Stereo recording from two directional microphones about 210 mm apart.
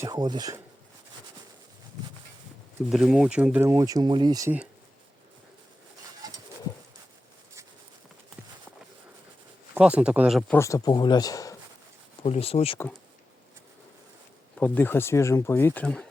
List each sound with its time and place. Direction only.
0.0 s speech: 20° right (ahead or behind)
2.9 s speech: centre (ahead or behind)
9.7 s speech: 5° right (ahead or behind)
10.6 s speech: 15° left (ahead or behind)
12.2 s speech: 30° left (ahead or behind)
14.6 s speech: 10° left (ahead or behind)